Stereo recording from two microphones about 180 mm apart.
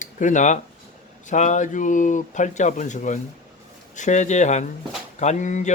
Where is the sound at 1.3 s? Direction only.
40° left (ahead or behind).